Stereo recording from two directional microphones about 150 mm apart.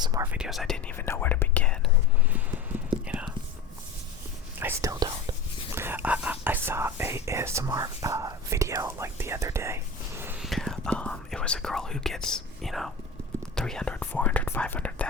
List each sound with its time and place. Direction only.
0.0 s speech: 25° right (ahead or behind)
0.3 s speech: 5° right (ahead or behind)
0.9 s speech: 15° left (ahead or behind)
3.1 s whispering: 10° right (ahead or behind)
4.6 s whispering: 20° right (ahead or behind)
5.7 s whispering: 15° right (ahead or behind)
10.4 s whispering: centre (ahead or behind)
13.6 s speech: 5° left (ahead or behind)